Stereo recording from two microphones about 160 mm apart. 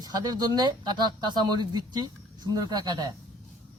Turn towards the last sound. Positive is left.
turn(degrees=-25)  # may be behind; listen again after turning